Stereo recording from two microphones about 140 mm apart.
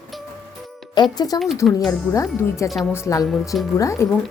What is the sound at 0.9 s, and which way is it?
Speech, 30° left (ahead or behind).